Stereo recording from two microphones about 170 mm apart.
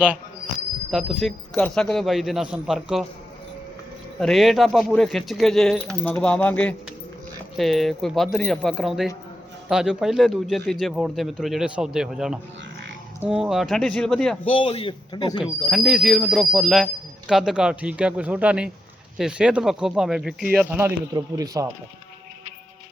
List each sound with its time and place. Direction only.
0.9 s a man's voice: 5° right (ahead or behind)
4.2 s a man's voice: centre (ahead or behind)
14.4 s speech: 30° left (ahead or behind)
15.7 s a man's voice: 5° right (ahead or behind); by 21.7 s 20° right (ahead or behind)